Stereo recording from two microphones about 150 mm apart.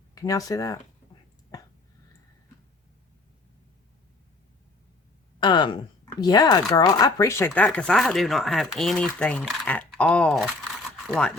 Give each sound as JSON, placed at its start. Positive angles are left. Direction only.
{"t": 0.1, "sound": "speech", "side_deg": 20}
{"t": 1.5, "sound": "a sound", "side_deg": 25}
{"t": 5.4, "sound": "speech", "side_deg": 30}